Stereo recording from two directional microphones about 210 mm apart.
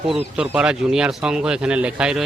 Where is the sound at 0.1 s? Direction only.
5° right (ahead or behind).